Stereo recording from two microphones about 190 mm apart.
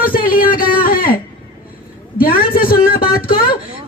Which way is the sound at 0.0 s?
50° left (ahead or behind).